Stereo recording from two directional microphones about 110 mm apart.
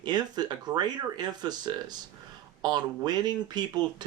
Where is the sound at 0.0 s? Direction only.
40° right (ahead or behind).